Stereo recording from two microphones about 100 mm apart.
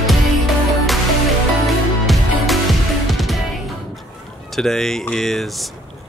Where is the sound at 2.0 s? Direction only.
Centre (ahead or behind).